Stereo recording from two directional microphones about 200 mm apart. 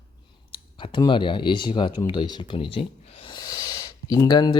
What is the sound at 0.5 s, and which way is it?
Speech, 25° left (ahead or behind).